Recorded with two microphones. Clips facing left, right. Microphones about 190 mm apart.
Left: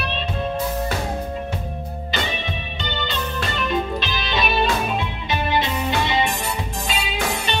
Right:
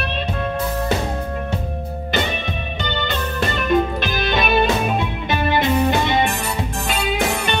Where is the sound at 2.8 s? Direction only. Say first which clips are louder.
Right 3 dB; 50° right (ahead or behind).